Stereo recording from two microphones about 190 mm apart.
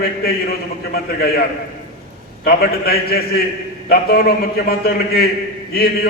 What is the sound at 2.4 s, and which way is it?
A man's voice, 55° left (ahead or behind).